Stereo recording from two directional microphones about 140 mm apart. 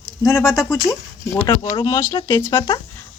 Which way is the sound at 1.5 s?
30° left (ahead or behind).